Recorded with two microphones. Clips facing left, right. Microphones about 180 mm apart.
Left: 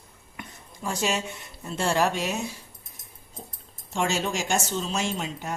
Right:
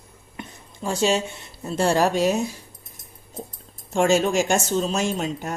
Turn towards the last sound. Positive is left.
turn(degrees=-45)  # may be behind; listen again after turning